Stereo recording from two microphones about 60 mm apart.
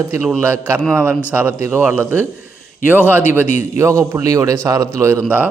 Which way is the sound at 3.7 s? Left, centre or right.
Right.